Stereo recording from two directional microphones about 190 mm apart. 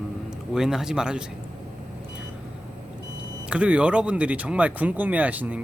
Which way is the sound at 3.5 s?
5° right (ahead or behind).